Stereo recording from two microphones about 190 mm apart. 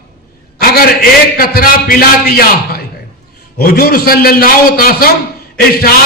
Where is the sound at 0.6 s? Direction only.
55° left (ahead or behind).